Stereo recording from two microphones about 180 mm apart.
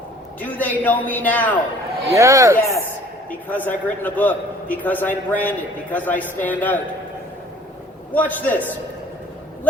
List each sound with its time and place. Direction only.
0.3 s a man's voice: 10° left (ahead or behind)
2.1 s speech: 15° right (ahead or behind)
3.2 s a man's voice: 10° left (ahead or behind)
8.1 s a man's voice: 10° left (ahead or behind)